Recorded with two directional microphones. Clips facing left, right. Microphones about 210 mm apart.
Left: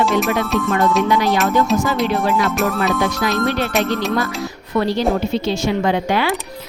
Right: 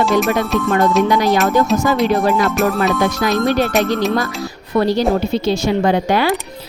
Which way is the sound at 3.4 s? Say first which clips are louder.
Right 4 dB; 45° right (ahead or behind).